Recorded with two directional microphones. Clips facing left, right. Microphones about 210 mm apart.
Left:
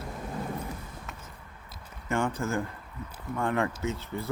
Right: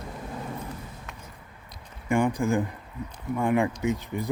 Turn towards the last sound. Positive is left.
turn(degrees=-15)  # may be behind; listen again after turning